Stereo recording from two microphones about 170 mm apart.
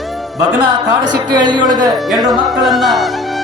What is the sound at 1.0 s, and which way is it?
Speech, 25° right (ahead or behind).